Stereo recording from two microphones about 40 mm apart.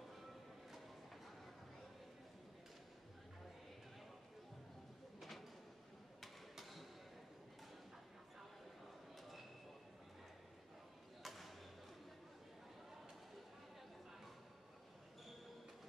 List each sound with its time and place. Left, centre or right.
0.1 s music: centre
5.2 s drawer open or close: centre
6.2 s a sound: centre
11.2 s basketball bounce: centre